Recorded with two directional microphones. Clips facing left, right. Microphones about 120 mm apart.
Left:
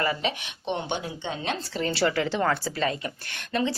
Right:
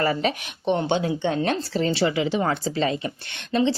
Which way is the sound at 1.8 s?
20° right (ahead or behind).